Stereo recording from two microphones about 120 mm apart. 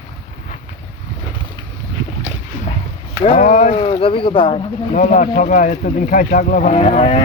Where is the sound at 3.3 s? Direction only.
90° left.